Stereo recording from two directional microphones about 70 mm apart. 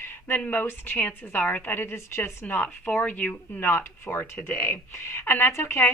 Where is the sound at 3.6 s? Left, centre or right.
Left.